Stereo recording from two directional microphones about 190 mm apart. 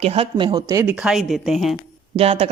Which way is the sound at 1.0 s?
Centre (ahead or behind).